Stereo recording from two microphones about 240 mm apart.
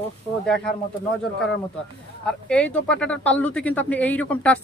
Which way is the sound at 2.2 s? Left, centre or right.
Centre.